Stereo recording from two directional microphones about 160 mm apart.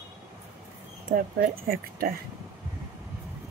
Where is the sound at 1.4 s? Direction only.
65° right (ahead or behind).